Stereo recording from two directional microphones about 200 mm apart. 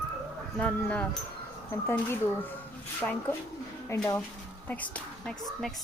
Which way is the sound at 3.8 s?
15° left (ahead or behind).